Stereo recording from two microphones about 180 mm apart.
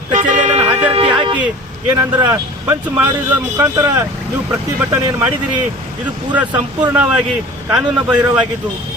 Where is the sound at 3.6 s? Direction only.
20° right (ahead or behind).